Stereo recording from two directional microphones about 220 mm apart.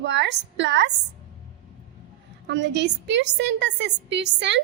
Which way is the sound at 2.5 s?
50° right (ahead or behind).